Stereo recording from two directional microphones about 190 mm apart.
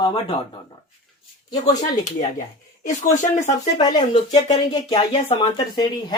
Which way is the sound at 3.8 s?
25° left (ahead or behind).